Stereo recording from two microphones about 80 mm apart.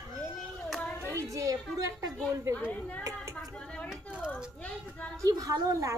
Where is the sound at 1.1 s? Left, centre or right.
Right.